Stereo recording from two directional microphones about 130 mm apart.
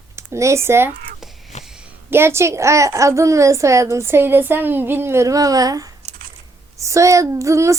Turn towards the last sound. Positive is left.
turn(degrees=-25)  # may be behind; listen again after turning